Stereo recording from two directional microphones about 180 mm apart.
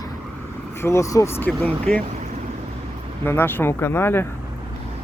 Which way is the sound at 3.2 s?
10° left (ahead or behind).